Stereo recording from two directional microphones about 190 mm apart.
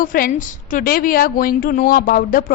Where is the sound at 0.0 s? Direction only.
50° left (ahead or behind).